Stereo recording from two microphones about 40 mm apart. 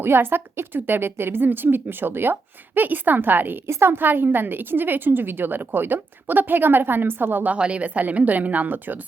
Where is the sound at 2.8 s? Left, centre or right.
Right.